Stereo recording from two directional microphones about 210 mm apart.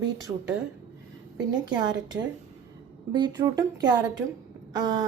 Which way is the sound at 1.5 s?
20° right (ahead or behind).